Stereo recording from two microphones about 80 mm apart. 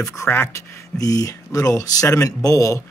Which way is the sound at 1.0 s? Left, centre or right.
Left.